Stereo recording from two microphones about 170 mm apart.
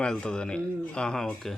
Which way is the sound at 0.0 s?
5° left (ahead or behind).